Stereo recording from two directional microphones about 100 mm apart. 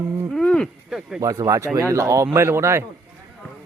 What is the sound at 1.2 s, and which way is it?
Speech, 35° right (ahead or behind).